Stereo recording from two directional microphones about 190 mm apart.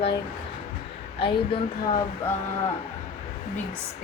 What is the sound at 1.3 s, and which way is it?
Speech, 25° left (ahead or behind).